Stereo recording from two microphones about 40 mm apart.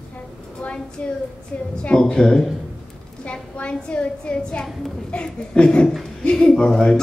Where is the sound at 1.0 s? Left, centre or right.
Left.